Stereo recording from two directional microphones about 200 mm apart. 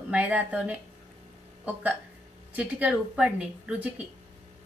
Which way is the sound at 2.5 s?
5° right (ahead or behind).